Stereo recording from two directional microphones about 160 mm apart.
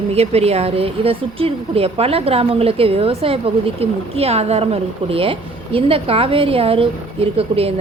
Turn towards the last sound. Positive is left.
turn(degrees=-40)  # may be behind; listen again after turning